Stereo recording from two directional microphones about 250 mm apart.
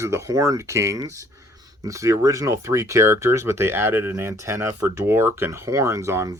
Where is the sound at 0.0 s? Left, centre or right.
Centre.